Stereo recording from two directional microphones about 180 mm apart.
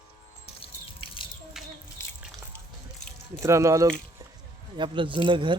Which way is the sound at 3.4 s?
15° right (ahead or behind).